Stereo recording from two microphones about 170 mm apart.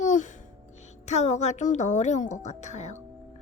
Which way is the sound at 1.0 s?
45° left (ahead or behind).